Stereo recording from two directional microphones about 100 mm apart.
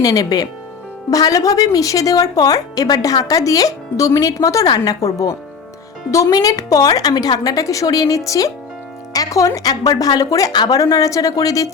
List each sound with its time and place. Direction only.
0.0 s speech: 40° left (ahead or behind)